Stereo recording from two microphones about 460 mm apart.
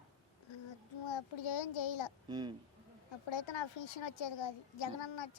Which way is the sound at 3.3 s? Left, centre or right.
Left.